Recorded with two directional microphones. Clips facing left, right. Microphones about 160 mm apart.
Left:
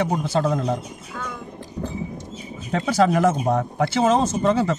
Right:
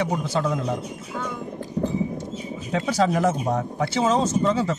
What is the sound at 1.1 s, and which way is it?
Speech, 15° right (ahead or behind).